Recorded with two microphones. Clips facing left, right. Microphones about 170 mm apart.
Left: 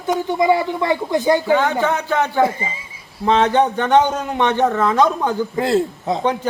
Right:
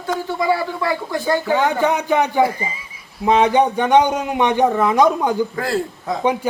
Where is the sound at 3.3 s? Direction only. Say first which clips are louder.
Right 1 dB; 10° right (ahead or behind).